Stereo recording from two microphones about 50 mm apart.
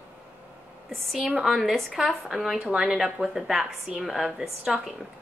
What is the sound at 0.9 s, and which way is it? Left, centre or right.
Speech, centre.